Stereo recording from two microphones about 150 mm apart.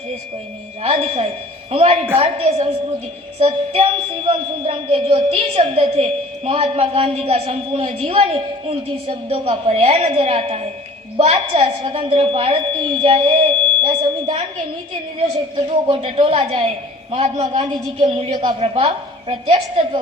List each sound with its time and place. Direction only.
0.8 s a woman's voice: 45° right (ahead or behind)
15.5 s a woman's voice: 40° right (ahead or behind)
18.3 s a woman's voice: 30° right (ahead or behind)